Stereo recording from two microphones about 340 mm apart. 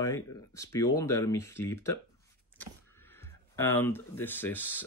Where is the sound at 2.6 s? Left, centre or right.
Centre.